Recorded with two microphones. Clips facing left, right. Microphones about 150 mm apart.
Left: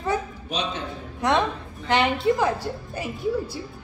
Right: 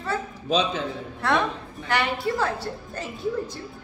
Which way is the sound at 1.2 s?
15° left (ahead or behind).